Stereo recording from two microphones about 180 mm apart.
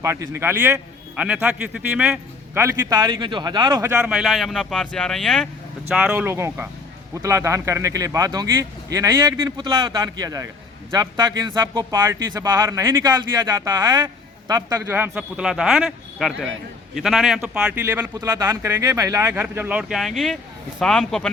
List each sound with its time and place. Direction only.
0.0 s speech: 15° right (ahead or behind)
3.8 s speech: 10° right (ahead or behind)